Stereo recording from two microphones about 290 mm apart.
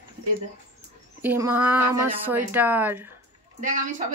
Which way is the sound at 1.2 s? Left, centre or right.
Centre.